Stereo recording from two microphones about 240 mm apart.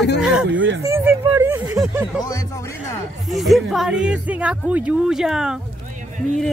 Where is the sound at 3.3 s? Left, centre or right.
Centre.